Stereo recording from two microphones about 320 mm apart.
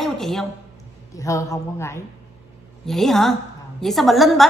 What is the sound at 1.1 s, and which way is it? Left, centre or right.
A woman's voice, centre.